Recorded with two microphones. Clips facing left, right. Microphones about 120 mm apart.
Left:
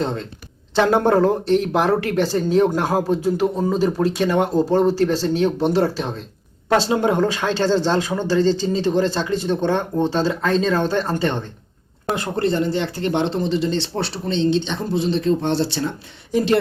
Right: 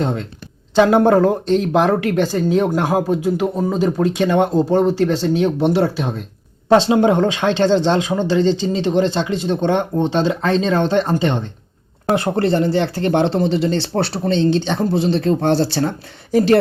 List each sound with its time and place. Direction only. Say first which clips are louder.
0.8 s speech: right 4 dB; 15° right (ahead or behind)
6.7 s speech: right 5 dB; 25° right (ahead or behind)
8.4 s speech: left 1 dB; 45° left (ahead or behind)
8.8 s speech: right 2 dB; 20° right (ahead or behind)
12.1 s speech: right 4 dB; 30° right (ahead or behind)